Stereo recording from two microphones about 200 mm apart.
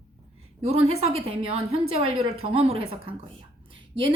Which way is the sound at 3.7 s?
25° right (ahead or behind).